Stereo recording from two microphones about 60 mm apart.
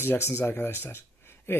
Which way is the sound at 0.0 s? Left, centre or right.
Left.